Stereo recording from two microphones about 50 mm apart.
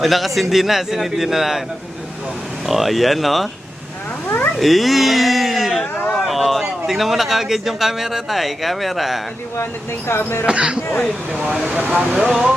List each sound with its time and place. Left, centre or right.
0.0 s speech: centre
2.6 s speech: centre
4.5 s speech: centre
10.1 s speech: left
10.4 s speech: centre
12.1 s speech: centre